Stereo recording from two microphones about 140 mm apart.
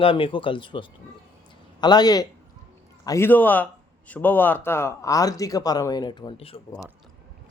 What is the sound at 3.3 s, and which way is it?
A man's voice, 15° left (ahead or behind).